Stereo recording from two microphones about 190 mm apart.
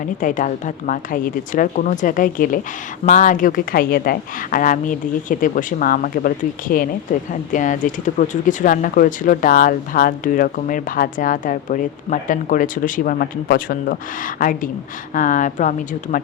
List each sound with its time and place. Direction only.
0.2 s a woman's voice: 45° left (ahead or behind)